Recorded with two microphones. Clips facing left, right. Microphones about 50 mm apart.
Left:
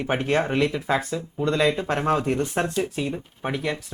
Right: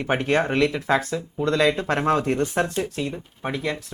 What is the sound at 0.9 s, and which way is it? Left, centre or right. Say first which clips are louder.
Speech: right 2 dB; centre.